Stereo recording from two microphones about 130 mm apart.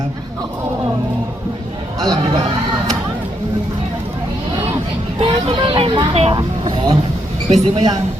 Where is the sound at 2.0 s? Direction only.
30° right (ahead or behind).